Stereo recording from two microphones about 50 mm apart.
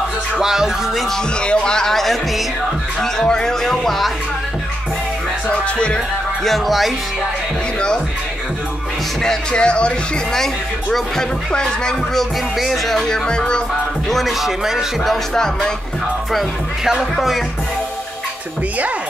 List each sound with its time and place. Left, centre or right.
0.4 s music: centre
1.1 s speech: centre
5.5 s music: left
6.4 s speech: centre
9.2 s music: centre
10.3 s speech: centre
14.0 s speech: centre
15.3 s speech: centre